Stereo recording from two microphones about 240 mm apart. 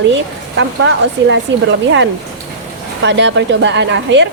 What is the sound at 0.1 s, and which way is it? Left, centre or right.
A woman's voice, right.